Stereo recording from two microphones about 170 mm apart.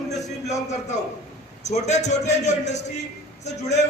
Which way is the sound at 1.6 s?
40° left (ahead or behind).